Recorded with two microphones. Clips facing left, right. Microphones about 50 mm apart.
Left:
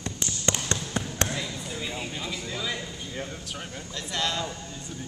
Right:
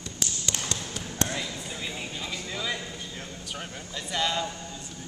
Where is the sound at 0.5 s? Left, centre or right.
Left.